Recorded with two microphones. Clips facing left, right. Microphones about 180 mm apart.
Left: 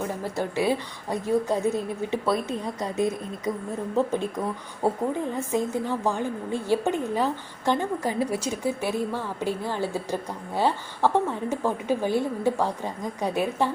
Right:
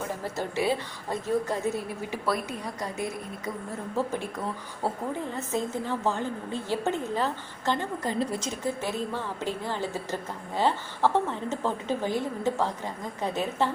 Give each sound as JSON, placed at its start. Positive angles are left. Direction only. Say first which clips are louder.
{"t": 0.3, "sound": "a woman's voice", "louder": "left 3 dB", "side_deg": 15}